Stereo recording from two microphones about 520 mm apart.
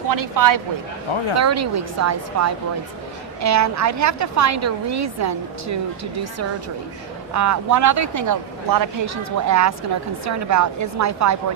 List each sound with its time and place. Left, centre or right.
0.1 s a woman's voice: right
7.3 s a woman's voice: right